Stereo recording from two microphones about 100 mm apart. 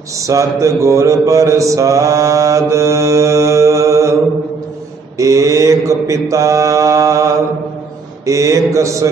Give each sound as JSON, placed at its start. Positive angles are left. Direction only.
{"t": 0.2, "sound": "mantra", "side_deg": -35}
{"t": 5.1, "sound": "mantra", "side_deg": -35}